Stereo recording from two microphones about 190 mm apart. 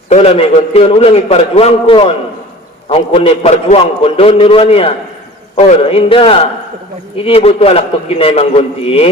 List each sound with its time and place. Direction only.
0.1 s a man's voice: 30° left (ahead or behind)